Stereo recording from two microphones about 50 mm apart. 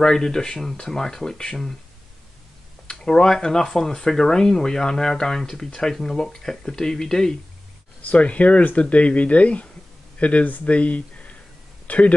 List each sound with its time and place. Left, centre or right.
0.0 s speech: centre
2.9 s speech: centre
8.1 s speech: left